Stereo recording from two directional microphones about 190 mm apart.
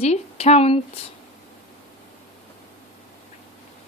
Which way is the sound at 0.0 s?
35° left (ahead or behind).